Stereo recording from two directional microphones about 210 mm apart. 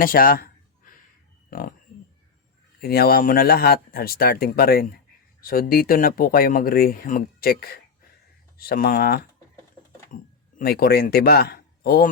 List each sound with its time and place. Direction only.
0.0 s speech: 45° left (ahead or behind)
0.8 s a sound: 40° left (ahead or behind)
2.8 s speech: 45° left (ahead or behind)
10.1 s speech: 35° left (ahead or behind)
10.6 s a man's voice: 50° left (ahead or behind)